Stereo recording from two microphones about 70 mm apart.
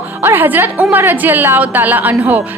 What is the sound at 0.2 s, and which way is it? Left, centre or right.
A woman's voice, right.